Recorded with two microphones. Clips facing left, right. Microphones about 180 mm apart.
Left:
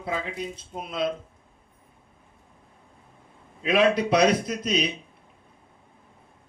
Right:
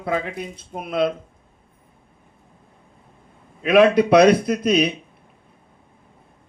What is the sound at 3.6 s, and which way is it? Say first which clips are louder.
A man's voice: right 7 dB; 60° right (ahead or behind).